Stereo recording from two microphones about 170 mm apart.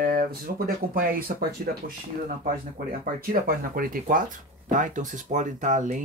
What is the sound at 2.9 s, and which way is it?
Speech, 55° right (ahead or behind).